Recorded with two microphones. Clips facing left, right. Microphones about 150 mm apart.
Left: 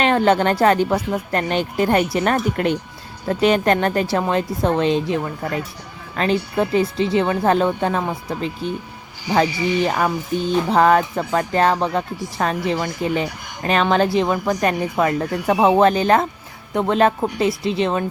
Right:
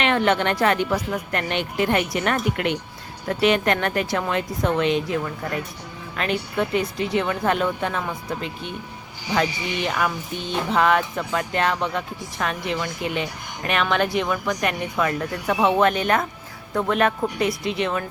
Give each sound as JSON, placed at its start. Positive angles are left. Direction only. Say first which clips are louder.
{"t": 0.0, "sound": "a woman's voice", "louder": "left 4 dB", "side_deg": 35}